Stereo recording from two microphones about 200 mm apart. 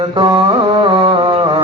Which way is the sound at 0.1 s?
25° right (ahead or behind).